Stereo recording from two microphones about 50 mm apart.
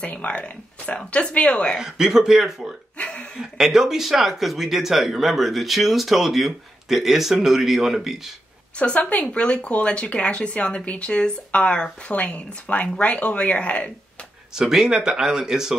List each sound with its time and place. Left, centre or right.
0.0 s speech: left
1.8 s speech: centre
3.0 s hiccup: left
3.3 s speech: centre
8.7 s speech: left
14.5 s speech: centre